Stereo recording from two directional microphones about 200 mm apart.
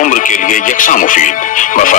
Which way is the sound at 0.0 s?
40° left (ahead or behind).